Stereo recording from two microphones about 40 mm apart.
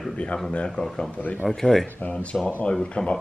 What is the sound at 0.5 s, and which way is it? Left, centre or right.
Speech, left.